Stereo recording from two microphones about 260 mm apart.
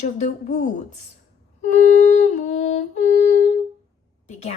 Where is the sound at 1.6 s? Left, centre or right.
Left.